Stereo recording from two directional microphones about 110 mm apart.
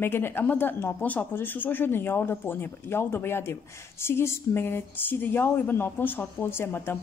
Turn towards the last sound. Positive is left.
turn(degrees=20)  # may be behind; listen again after turning